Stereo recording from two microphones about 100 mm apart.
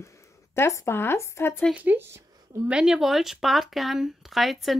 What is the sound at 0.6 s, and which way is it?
Speech, 25° left (ahead or behind).